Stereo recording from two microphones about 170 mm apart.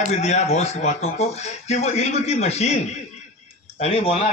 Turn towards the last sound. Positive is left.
turn(degrees=35)  # may be behind; listen again after turning